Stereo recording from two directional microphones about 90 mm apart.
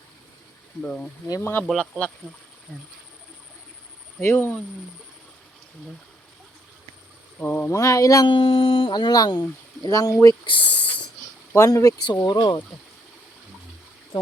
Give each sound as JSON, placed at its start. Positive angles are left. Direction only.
{"t": 0.8, "sound": "speech", "side_deg": 10}
{"t": 1.4, "sound": "speech", "side_deg": 25}
{"t": 1.6, "sound": "speech", "side_deg": 5}
{"t": 4.2, "sound": "speech", "side_deg": 25}
{"t": 7.4, "sound": "speech", "side_deg": 20}
{"t": 7.7, "sound": "speech", "side_deg": 35}
{"t": 8.3, "sound": "speech", "side_deg": 75}
{"t": 10.4, "sound": "a sound", "side_deg": 70}
{"t": 11.5, "sound": "speech", "side_deg": 35}
{"t": 12.2, "sound": "speech", "side_deg": 55}